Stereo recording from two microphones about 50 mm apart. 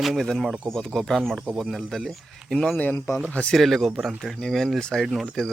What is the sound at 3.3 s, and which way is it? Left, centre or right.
Speech, left.